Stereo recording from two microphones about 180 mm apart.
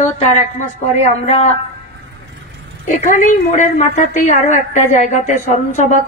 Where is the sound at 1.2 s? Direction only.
40° left (ahead or behind).